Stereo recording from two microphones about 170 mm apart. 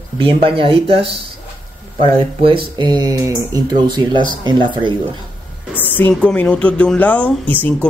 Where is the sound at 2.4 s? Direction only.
30° right (ahead or behind).